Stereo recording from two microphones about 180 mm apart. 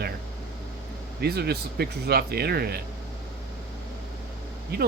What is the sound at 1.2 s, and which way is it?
Speech, 60° right (ahead or behind).